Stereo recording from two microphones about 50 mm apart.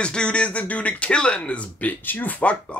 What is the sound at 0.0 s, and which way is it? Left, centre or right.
Speech, centre.